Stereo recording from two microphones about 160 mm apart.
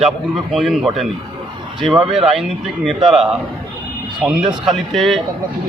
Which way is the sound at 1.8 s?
30° right (ahead or behind).